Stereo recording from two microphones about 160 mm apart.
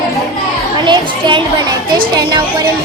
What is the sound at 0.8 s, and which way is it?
A child's voice, 30° right (ahead or behind).